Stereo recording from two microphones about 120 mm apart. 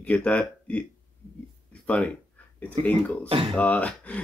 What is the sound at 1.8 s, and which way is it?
Speech, 10° left (ahead or behind).